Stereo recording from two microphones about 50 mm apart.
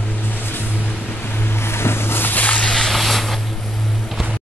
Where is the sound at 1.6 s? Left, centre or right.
Left.